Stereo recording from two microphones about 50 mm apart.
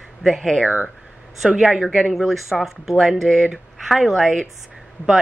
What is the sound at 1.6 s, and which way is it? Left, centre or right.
Speech, centre.